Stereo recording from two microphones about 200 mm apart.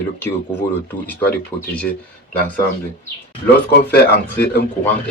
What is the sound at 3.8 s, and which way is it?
Speech, 55° left (ahead or behind).